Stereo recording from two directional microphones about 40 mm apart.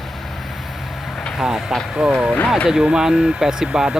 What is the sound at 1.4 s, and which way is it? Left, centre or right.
Speech, centre.